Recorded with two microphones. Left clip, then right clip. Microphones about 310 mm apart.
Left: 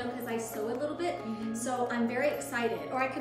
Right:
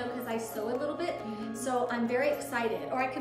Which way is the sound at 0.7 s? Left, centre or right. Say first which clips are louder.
Right 1 dB; centre.